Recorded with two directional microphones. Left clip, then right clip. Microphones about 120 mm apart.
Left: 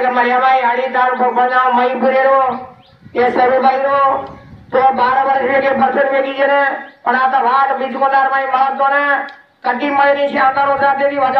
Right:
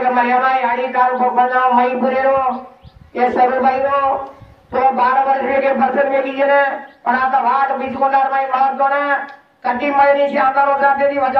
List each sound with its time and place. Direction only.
0.0 s a man's voice: 20° left (ahead or behind)